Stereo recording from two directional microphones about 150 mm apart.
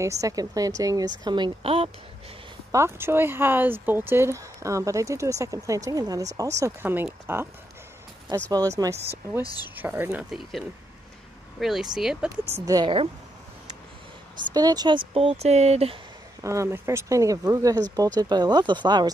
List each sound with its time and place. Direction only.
0.0 s speech: 20° right (ahead or behind); by 1.9 s 35° right (ahead or behind)
2.7 s speech: 15° right (ahead or behind)
8.5 s speech: 25° right (ahead or behind)
9.4 s speech: 25° left (ahead or behind)
9.8 s speech: 15° right (ahead or behind)
11.6 s speech: 5° right (ahead or behind)
12.6 s speech: 30° right (ahead or behind)
14.5 s speech: 25° right (ahead or behind); by 16.0 s 45° right (ahead or behind)
16.3 s speech: 20° right (ahead or behind)